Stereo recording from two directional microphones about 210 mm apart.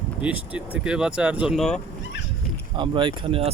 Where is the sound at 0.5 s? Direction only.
5° right (ahead or behind).